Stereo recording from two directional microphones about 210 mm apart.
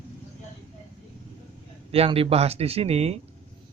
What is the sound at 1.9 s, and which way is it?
Speech, 30° right (ahead or behind).